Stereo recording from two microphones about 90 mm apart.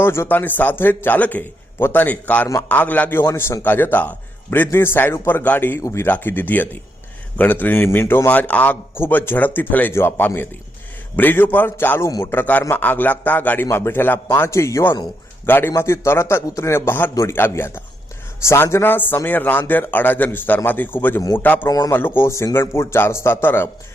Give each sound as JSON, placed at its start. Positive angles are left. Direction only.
{"t": 0.0, "sound": "a man's voice", "side_deg": 25}
{"t": 21.7, "sound": "a man's voice", "side_deg": 45}
{"t": 21.9, "sound": "a man's voice", "side_deg": 25}